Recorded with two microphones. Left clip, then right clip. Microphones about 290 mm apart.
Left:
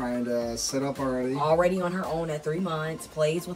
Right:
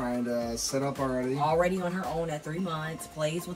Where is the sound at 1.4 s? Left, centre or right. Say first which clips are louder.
Left 4 dB; centre.